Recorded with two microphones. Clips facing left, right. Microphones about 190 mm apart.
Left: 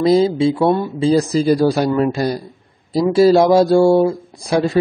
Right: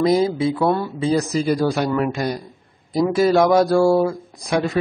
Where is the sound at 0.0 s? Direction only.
25° left (ahead or behind).